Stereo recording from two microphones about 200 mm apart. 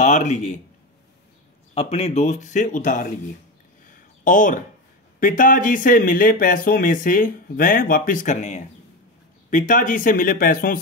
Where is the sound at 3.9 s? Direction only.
40° left (ahead or behind).